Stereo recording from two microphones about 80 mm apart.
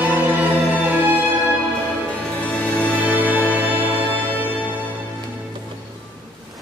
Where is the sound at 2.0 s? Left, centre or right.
Centre.